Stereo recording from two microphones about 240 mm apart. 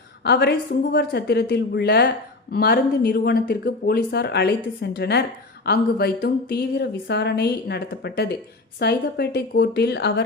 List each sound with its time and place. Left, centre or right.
0.3 s speech: left